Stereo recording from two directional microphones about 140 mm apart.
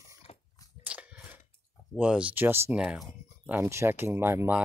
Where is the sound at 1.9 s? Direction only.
10° right (ahead or behind).